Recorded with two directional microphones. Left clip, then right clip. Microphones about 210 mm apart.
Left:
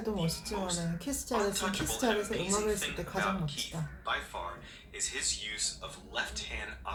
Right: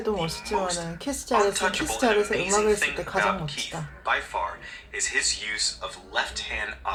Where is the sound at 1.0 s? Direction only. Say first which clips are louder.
Right 10 dB; 15° right (ahead or behind).